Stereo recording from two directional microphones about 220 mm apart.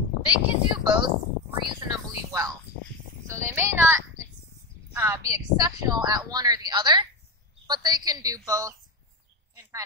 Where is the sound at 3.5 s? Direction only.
10° right (ahead or behind).